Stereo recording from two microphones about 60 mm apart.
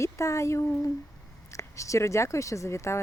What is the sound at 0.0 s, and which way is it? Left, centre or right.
Speech, left.